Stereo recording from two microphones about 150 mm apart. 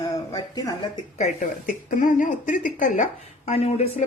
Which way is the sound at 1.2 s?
55° left (ahead or behind).